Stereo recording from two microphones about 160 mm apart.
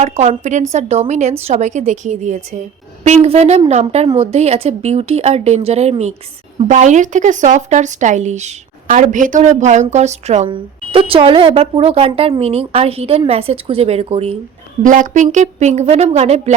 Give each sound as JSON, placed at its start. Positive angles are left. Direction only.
{"t": 0.0, "sound": "speech", "side_deg": -45}
{"t": 10.5, "sound": "speech", "side_deg": -35}
{"t": 14.8, "sound": "speech", "side_deg": -55}